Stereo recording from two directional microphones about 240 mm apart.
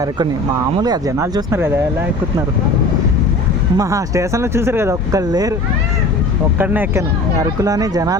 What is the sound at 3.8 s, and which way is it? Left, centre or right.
Speech, centre.